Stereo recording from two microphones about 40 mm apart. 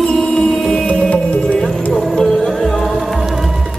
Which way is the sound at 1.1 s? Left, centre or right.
Left.